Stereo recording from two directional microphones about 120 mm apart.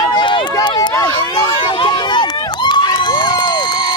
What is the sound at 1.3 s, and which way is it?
Crowd, 40° left (ahead or behind).